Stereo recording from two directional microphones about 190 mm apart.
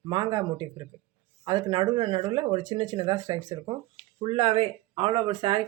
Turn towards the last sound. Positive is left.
turn(degrees=-25)  # may be behind; listen again after turning